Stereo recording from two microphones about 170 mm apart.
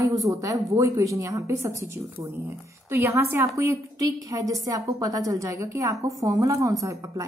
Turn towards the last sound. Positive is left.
turn(degrees=-20)  # may be behind; listen again after turning